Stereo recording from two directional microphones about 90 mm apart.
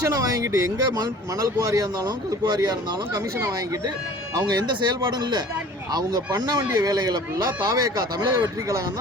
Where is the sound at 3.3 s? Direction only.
30° right (ahead or behind).